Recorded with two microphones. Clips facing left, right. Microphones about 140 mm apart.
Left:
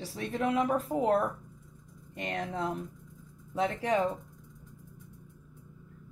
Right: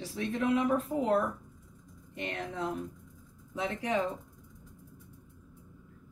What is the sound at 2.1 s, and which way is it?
Speech, 45° left (ahead or behind).